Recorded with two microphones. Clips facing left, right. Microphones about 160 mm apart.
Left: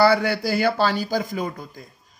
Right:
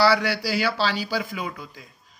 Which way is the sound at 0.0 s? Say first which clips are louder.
Left 3 dB; 50° left (ahead or behind).